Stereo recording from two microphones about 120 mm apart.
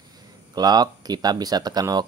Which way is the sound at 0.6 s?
35° right (ahead or behind).